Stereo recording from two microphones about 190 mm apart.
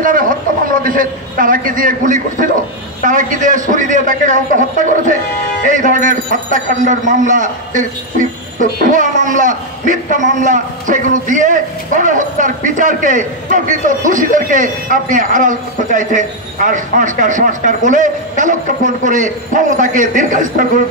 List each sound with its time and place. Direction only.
0.0 s a man's voice: 45° right (ahead or behind)